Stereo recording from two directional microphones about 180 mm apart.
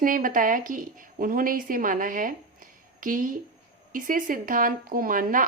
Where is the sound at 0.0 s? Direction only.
50° right (ahead or behind).